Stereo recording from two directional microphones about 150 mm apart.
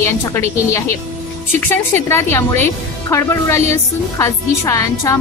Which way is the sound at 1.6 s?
15° left (ahead or behind).